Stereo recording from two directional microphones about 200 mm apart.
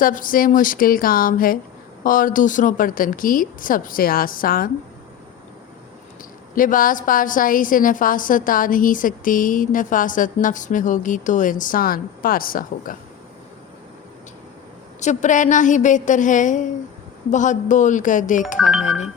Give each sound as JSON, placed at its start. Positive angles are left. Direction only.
{"t": 0.0, "sound": "a woman's voice", "side_deg": 45}
{"t": 6.6, "sound": "a woman's voice", "side_deg": 45}
{"t": 15.0, "sound": "a woman's voice", "side_deg": 40}
{"t": 18.6, "sound": "speech", "side_deg": 0}